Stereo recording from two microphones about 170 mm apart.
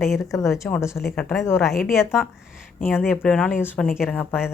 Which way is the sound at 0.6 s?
15° left (ahead or behind).